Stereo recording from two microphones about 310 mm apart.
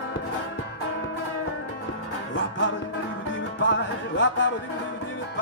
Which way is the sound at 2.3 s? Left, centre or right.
Left.